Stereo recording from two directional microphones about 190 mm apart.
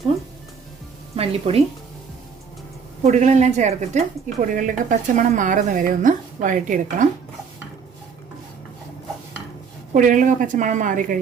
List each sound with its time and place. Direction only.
1.1 s speech: 30° right (ahead or behind)
3.0 s a woman's voice: 35° right (ahead or behind)
9.9 s a woman's voice: 45° right (ahead or behind)